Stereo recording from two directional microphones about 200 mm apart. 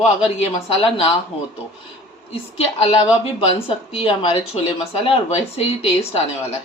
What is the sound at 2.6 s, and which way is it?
Speech, 30° left (ahead or behind).